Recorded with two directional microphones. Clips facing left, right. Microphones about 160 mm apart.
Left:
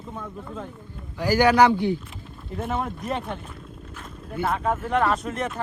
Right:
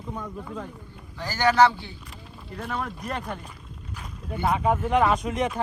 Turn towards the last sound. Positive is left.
turn(degrees=0)  # may be behind; listen again after turning